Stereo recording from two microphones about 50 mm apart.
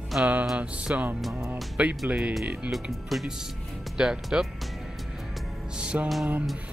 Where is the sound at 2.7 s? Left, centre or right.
Centre.